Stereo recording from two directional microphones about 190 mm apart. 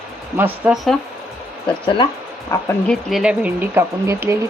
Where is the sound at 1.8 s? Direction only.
25° left (ahead or behind).